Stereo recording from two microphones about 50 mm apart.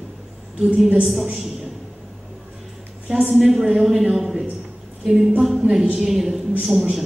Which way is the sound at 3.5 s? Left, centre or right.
Centre.